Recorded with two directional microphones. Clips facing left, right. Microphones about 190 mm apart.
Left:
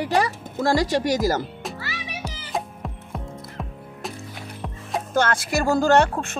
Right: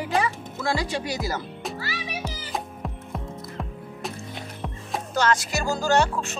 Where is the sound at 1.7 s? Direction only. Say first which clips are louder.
Right 1 dB; 35° right (ahead or behind).